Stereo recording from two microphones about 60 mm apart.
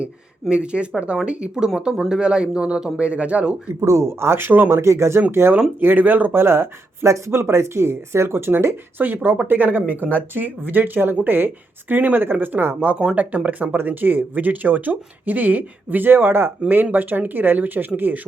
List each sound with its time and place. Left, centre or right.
0.5 s speech: centre
3.8 s speech: right
4.7 s speech: right
6.3 s speech: right
9.0 s speech: right